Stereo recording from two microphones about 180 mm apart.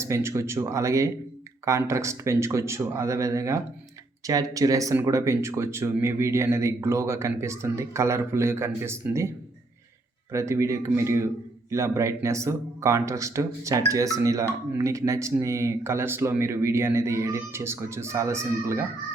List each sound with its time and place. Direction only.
0.0 s speech: 15° right (ahead or behind)
10.3 s speech: 15° right (ahead or behind)